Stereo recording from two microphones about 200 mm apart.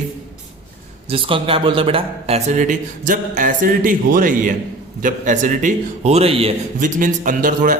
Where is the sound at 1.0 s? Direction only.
25° right (ahead or behind).